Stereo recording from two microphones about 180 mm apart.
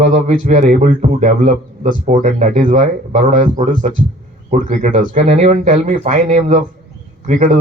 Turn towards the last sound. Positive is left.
turn(degrees=-45)  # may be behind; listen again after turning